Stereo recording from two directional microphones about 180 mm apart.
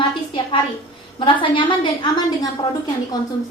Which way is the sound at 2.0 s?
25° left (ahead or behind).